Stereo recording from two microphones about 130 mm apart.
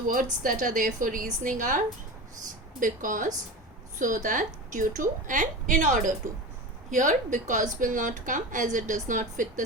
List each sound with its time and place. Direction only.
0.1 s a woman's voice: 90° right
2.8 s a woman's voice: 90° right